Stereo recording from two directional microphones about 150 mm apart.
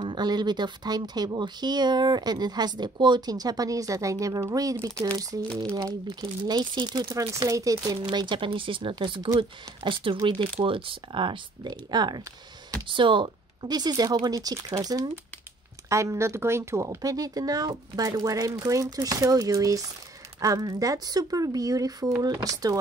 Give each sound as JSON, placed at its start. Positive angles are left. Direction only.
{"t": 0.0, "sound": "speech", "side_deg": -30}